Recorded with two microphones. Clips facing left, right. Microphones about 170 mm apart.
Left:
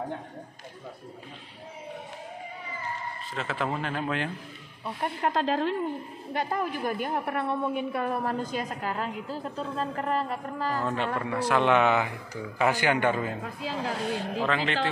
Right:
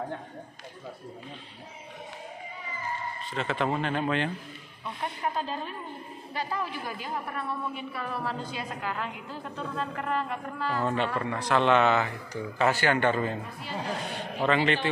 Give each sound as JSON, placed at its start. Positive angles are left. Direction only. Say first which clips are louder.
{"t": 3.3, "sound": "speech", "louder": "right 2 dB", "side_deg": 0}
{"t": 5.0, "sound": "speech", "louder": "left 5 dB", "side_deg": 80}
{"t": 6.3, "sound": "a woman's voice", "louder": "left 4 dB", "side_deg": 50}
{"t": 11.1, "sound": "speech", "louder": "left 1 dB", "side_deg": 5}
{"t": 13.4, "sound": "speech", "louder": "left 3 dB", "side_deg": 90}
{"t": 14.4, "sound": "speech", "louder": "right 5 dB", "side_deg": 0}